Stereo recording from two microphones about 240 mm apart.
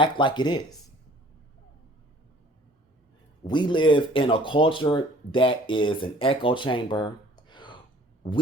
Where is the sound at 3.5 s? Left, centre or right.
Centre.